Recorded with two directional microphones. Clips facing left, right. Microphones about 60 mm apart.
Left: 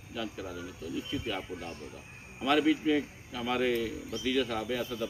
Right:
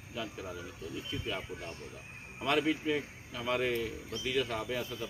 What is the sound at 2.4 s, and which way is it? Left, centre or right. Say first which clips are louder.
Speech: left 4 dB; centre.